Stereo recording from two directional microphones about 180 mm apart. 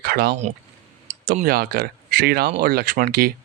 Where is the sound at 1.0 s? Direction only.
45° right (ahead or behind).